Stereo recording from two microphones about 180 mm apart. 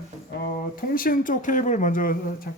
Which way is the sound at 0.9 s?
50° left (ahead or behind).